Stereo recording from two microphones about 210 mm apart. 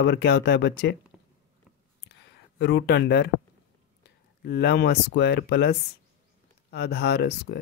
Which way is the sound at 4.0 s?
50° left (ahead or behind).